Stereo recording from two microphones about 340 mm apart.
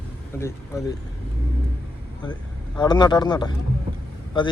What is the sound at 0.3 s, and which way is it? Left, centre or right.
Speech, centre.